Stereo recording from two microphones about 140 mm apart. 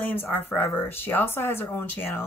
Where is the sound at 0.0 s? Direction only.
15° left (ahead or behind).